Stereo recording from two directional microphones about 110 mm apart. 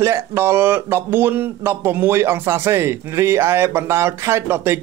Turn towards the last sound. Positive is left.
turn(degrees=-20)  # may be behind; listen again after turning